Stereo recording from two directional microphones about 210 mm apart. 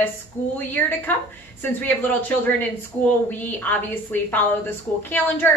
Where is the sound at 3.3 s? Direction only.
10° left (ahead or behind).